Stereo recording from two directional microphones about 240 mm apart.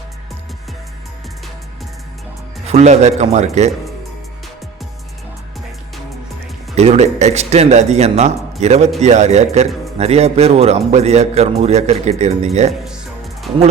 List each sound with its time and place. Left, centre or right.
2.6 s speech: right
6.7 s speech: right